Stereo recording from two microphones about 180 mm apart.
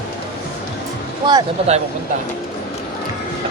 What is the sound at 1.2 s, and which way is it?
Speech, 25° right (ahead or behind).